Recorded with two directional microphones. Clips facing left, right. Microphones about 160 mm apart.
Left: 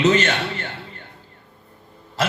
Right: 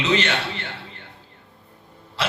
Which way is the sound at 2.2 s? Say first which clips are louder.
Left 3 dB; 45° left (ahead or behind).